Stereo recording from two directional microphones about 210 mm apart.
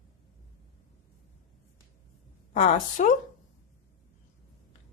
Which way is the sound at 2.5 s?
35° left (ahead or behind).